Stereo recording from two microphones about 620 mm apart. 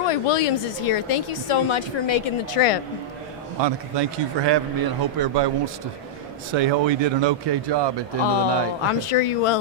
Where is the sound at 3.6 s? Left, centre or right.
Right.